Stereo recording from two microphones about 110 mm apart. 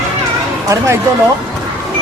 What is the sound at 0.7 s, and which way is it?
Speech, 25° right (ahead or behind).